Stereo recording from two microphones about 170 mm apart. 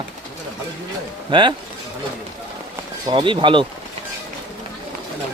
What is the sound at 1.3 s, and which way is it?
Speech, 30° right (ahead or behind).